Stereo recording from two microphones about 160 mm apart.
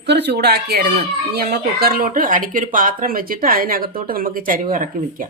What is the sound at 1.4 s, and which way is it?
Speech, 70° right (ahead or behind).